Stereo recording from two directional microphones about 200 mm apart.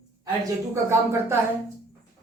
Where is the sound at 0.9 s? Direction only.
10° right (ahead or behind).